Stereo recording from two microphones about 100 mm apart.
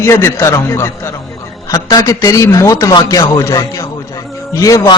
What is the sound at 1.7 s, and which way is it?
A man's voice, 40° left (ahead or behind).